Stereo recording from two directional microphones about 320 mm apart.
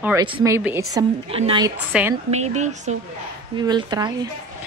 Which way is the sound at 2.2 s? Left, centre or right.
Right.